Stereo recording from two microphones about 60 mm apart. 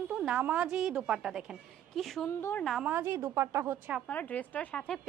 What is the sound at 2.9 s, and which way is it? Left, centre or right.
Speech, right.